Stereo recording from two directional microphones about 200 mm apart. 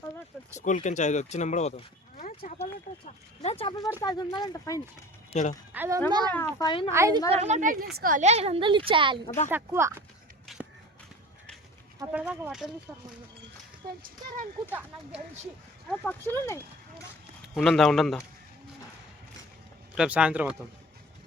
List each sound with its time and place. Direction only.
0.5 s speech: 40° left (ahead or behind)
3.4 s speech: 30° left (ahead or behind)
5.3 s speech: 35° left (ahead or behind)
5.7 s speech: 10° right (ahead or behind)
6.1 s a woman's voice: 20° right (ahead or behind)
6.3 s speech: 15° left (ahead or behind)
7.3 s a woman's voice: 35° right (ahead or behind)
9.5 s speech: 10° right (ahead or behind)
10.4 s a sound: centre (ahead or behind)
12.1 s speech: 10° right (ahead or behind)
14.7 s speech: 10° right (ahead or behind)
15.9 s speech: 10° left (ahead or behind)
20.0 s speech: 5° right (ahead or behind)